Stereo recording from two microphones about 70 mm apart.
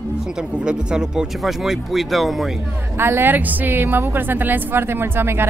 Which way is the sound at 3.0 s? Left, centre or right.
Right.